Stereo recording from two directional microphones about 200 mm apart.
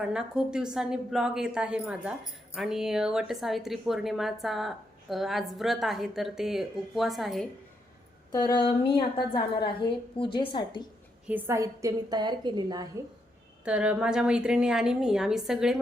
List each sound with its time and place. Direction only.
0.0 s speech: 5° right (ahead or behind)
8.3 s a woman's voice: 20° left (ahead or behind)
11.3 s a woman's voice: 10° right (ahead or behind)
13.7 s speech: 5° right (ahead or behind)